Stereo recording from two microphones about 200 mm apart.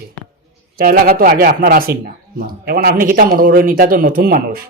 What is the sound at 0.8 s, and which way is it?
A man's voice, 45° right (ahead or behind).